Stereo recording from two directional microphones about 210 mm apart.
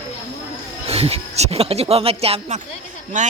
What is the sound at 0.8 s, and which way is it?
Speech, 30° right (ahead or behind).